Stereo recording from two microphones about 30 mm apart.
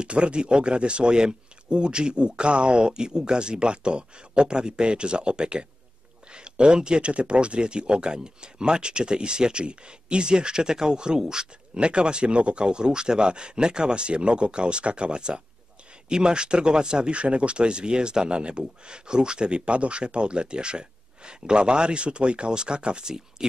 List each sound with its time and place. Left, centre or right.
0.0 s speech: right
17.1 s speech: right